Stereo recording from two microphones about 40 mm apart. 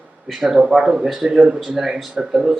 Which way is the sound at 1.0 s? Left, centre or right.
Centre.